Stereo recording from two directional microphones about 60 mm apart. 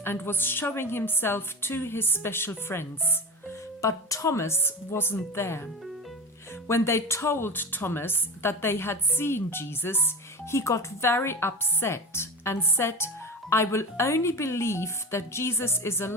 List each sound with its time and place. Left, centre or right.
0.0 s a woman's voice: left
3.8 s a woman's voice: left
6.7 s a woman's voice: left
10.5 s a woman's voice: left